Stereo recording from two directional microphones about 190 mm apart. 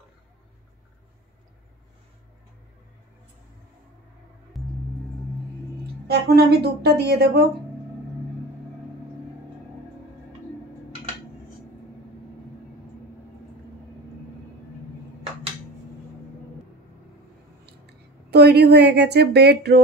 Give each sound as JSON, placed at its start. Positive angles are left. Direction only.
{"t": 4.6, "sound": "gong", "side_deg": 0}
{"t": 6.0, "sound": "speech", "side_deg": -55}
{"t": 18.3, "sound": "speech", "side_deg": -60}